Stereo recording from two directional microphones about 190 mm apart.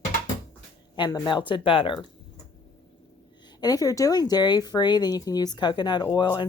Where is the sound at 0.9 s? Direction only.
25° left (ahead or behind).